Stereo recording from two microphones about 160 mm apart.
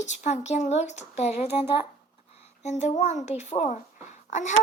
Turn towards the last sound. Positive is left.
turn(degrees=50)  # may be behind; listen again after turning